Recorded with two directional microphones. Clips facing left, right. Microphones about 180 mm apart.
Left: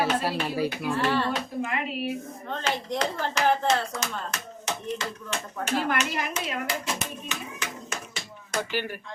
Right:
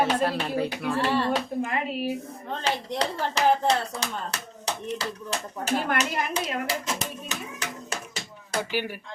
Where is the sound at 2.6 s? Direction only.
35° right (ahead or behind).